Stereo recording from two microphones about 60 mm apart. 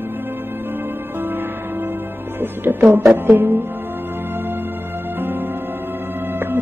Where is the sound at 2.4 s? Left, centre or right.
Right.